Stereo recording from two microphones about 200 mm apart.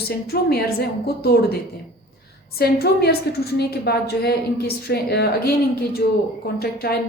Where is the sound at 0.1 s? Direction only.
50° left (ahead or behind).